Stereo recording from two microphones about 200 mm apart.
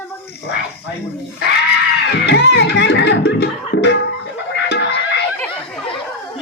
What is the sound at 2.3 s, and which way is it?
Music, 60° left (ahead or behind).